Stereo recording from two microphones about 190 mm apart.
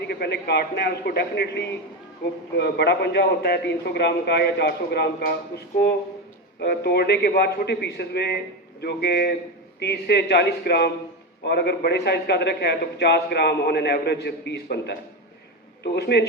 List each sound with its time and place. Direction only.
0.1 s a man's voice: 60° left (ahead or behind)